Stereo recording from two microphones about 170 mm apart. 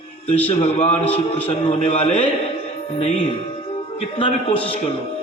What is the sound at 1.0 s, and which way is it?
Speech, 10° left (ahead or behind).